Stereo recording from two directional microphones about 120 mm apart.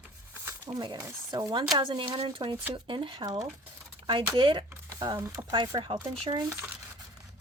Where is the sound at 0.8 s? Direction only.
35° right (ahead or behind).